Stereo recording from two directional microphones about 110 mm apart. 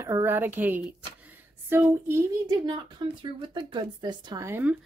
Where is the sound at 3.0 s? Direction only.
40° right (ahead or behind).